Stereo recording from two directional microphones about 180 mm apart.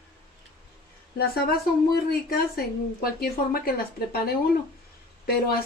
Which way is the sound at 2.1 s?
60° left (ahead or behind).